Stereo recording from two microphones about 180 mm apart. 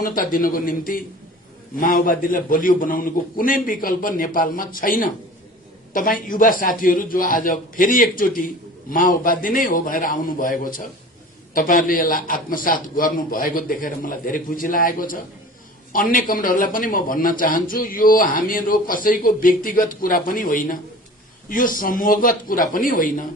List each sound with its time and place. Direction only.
0.0 s a man's voice: 50° left (ahead or behind)